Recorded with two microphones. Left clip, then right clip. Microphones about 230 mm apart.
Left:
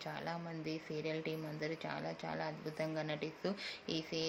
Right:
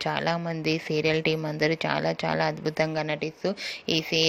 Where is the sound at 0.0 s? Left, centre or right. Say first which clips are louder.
Right 16 dB; right.